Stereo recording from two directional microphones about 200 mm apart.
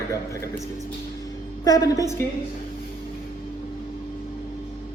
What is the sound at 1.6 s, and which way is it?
Speech, 20° left (ahead or behind).